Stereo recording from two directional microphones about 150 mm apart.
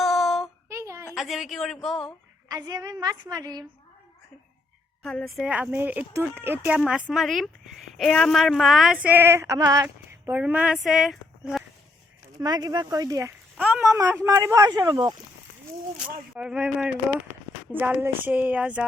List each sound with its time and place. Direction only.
0.0 s a sound: centre (ahead or behind)
0.7 s a sound: 20° right (ahead or behind)
1.1 s speech: centre (ahead or behind)
2.5 s a woman's voice: 25° right (ahead or behind)
5.0 s female singing: centre (ahead or behind)
7.1 s speech: centre (ahead or behind)
7.9 s female singing: 5° left (ahead or behind)
12.4 s a woman's voice: 25° right (ahead or behind)
13.6 s speech: 5° right (ahead or behind)
13.8 s a woman's voice: 20° right (ahead or behind)
16.0 s speech: 5° right (ahead or behind)
17.7 s female singing: 10° right (ahead or behind)